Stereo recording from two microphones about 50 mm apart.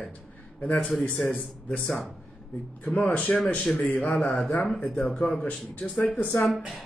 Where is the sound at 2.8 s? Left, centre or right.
Left.